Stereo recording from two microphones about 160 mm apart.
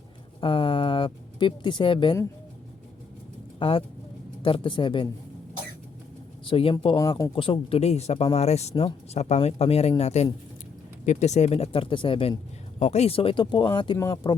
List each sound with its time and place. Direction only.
0.4 s speech: 35° left (ahead or behind)
3.6 s speech: 35° left (ahead or behind)
6.4 s speech: 35° left (ahead or behind)
6.9 s speech: 20° left (ahead or behind)
7.3 s speech: 35° left (ahead or behind)